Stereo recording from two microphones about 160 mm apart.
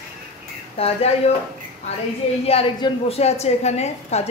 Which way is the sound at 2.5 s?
40° left (ahead or behind).